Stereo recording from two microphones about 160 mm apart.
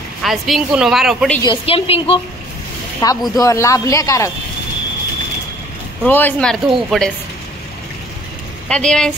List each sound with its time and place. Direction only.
0.2 s speech: centre (ahead or behind)
1.4 s a woman's voice: 35° left (ahead or behind)
3.0 s speech: 25° left (ahead or behind)
6.0 s speech: 10° left (ahead or behind)
8.6 s speech: 5° left (ahead or behind)